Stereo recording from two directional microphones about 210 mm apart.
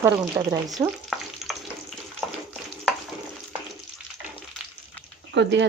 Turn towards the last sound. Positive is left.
turn(degrees=-55)  # may be behind; listen again after turning